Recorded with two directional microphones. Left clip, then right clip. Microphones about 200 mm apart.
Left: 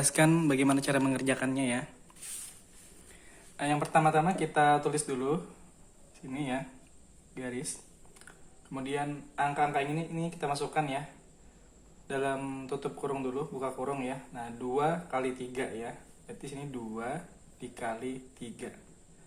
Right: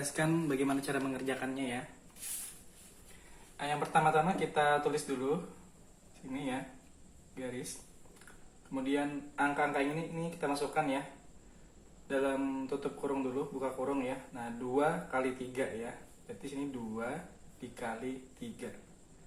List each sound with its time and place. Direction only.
0.2 s speech: 40° left (ahead or behind)
3.6 s speech: 50° left (ahead or behind)
8.7 s speech: 45° left (ahead or behind)
12.0 s speech: 50° left (ahead or behind)
17.6 s speech: 50° left (ahead or behind)